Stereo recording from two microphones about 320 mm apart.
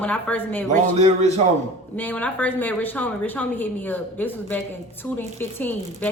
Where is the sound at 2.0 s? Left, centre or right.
Centre.